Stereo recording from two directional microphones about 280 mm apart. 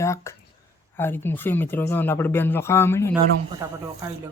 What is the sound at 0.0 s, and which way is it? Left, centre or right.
Speech, centre.